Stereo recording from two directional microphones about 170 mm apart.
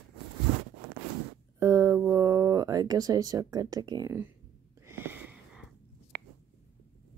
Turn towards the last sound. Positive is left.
turn(degrees=-60)  # may be behind; listen again after turning